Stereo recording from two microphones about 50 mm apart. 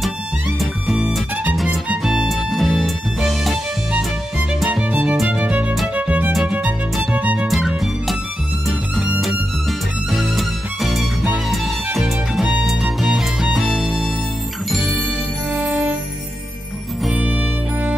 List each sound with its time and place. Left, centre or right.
1.9 s music: centre
2.2 s music: centre
5.3 s music: right
7.4 s music: centre
9.2 s music: centre
14.8 s music: right